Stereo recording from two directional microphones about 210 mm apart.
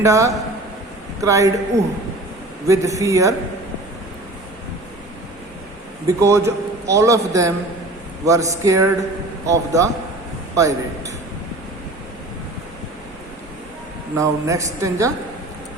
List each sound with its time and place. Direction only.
0.0 s a man's voice: 15° right (ahead or behind)
6.2 s a man's voice: 15° right (ahead or behind)
14.2 s a man's voice: 15° right (ahead or behind)